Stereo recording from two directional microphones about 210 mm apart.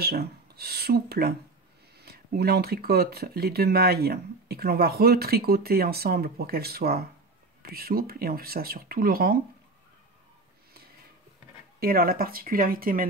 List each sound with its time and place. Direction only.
0.0 s speech: 50° right (ahead or behind)
11.8 s speech: 45° right (ahead or behind)